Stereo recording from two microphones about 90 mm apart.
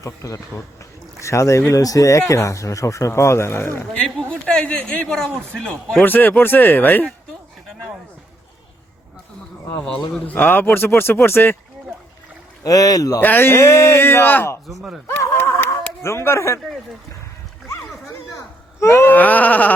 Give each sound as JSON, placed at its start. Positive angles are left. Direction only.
{"t": 0.0, "sound": "speech", "side_deg": 35}
{"t": 0.8, "sound": "a sound", "side_deg": 35}
{"t": 1.7, "sound": "speech", "side_deg": 40}
{"t": 3.9, "sound": "a man's voice", "side_deg": 15}
{"t": 6.0, "sound": "speech", "side_deg": 20}
{"t": 9.8, "sound": "speech", "side_deg": 10}
{"t": 12.6, "sound": "speech", "side_deg": 40}
{"t": 13.1, "sound": "speech", "side_deg": 25}
{"t": 14.7, "sound": "speech", "side_deg": 0}
{"t": 15.0, "sound": "a sound", "side_deg": 25}
{"t": 16.0, "sound": "speech", "side_deg": 30}
{"t": 18.8, "sound": "speech", "side_deg": 30}
{"t": 19.1, "sound": "speech", "side_deg": 20}